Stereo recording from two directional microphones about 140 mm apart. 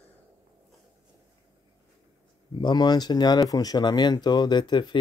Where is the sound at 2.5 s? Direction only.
30° left (ahead or behind).